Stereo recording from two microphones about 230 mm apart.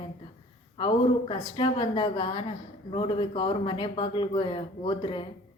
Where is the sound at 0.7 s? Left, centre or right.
Left.